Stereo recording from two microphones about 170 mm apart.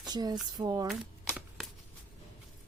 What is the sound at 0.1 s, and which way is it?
Speech, 25° right (ahead or behind).